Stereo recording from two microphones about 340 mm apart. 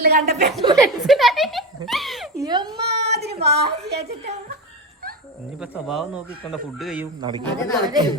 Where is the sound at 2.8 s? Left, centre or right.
Right.